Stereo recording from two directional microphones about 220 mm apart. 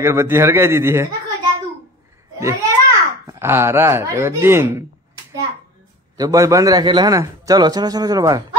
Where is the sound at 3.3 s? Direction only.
10° right (ahead or behind).